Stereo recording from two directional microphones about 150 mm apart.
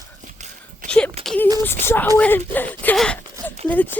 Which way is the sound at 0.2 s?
55° right (ahead or behind).